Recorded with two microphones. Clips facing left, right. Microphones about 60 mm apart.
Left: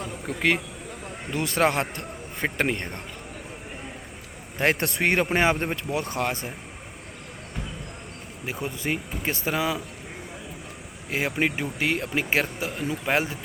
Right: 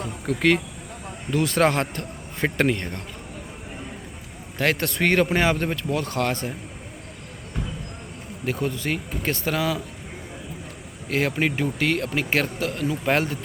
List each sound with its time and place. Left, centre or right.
0.3 s speech: centre
2.7 s speech: left
4.5 s speech: left
8.4 s speech: centre
11.1 s speech: centre